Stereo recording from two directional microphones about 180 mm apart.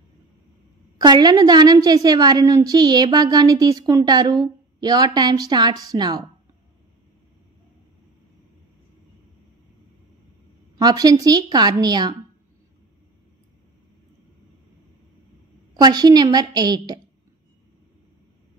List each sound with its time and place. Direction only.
0.9 s a woman's voice: 25° right (ahead or behind)
10.8 s a woman's voice: 20° right (ahead or behind)
15.7 s a woman's voice: 20° right (ahead or behind)